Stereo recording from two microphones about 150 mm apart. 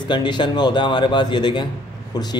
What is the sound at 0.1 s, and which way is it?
Speech, 30° left (ahead or behind).